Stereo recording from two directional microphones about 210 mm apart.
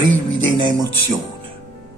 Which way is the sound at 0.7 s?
20° right (ahead or behind).